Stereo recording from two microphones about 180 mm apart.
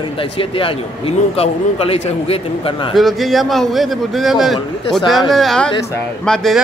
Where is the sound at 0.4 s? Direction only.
30° left (ahead or behind).